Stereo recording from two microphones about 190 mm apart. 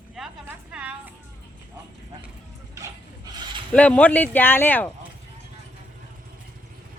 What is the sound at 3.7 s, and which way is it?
Speech, 5° left (ahead or behind).